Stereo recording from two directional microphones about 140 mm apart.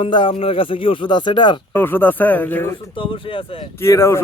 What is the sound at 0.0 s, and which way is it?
Speech, 35° left (ahead or behind).